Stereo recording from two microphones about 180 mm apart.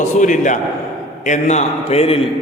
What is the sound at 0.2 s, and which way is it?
A man's voice, 45° left (ahead or behind).